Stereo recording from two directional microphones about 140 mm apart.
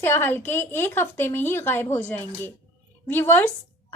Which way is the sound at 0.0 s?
15° left (ahead or behind).